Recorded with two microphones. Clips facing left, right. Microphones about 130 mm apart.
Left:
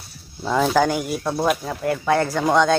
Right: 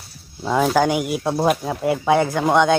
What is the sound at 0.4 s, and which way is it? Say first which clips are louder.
Speech: right 1 dB; 5° right (ahead or behind).